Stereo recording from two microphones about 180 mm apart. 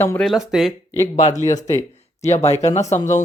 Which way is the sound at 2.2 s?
35° left (ahead or behind).